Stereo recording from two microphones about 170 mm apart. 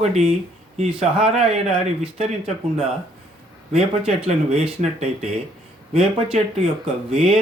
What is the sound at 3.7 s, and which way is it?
Speech, 40° right (ahead or behind).